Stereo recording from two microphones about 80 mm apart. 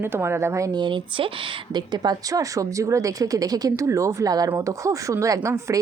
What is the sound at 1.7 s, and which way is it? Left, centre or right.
Speech, right.